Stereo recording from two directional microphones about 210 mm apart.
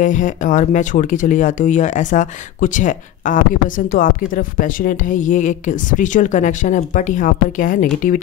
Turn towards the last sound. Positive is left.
turn(degrees=40)  # may be behind; listen again after turning